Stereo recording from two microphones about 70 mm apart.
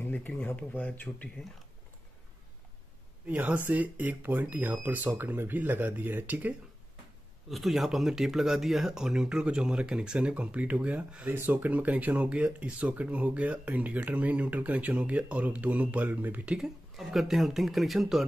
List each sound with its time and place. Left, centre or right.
0.0 s a sound: left
0.6 s speech: left
3.3 s speech: right
7.4 s speech: centre; by 16.5 s right
16.5 s speech: centre